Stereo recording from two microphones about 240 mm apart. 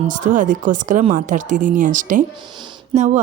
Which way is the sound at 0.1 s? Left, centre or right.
Right.